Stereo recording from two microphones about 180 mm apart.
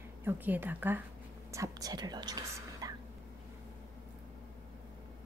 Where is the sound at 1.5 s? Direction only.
20° right (ahead or behind).